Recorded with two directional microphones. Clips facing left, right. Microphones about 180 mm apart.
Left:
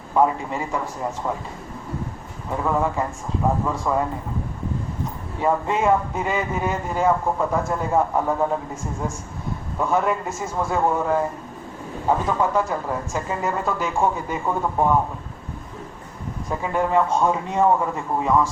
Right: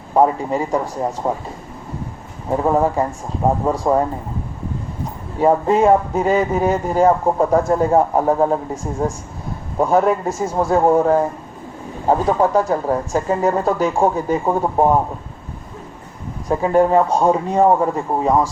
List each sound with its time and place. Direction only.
0.1 s a man's voice: 40° right (ahead or behind)
2.5 s a man's voice: 40° right (ahead or behind)
5.4 s a man's voice: 35° right (ahead or behind)
16.5 s a man's voice: 40° right (ahead or behind)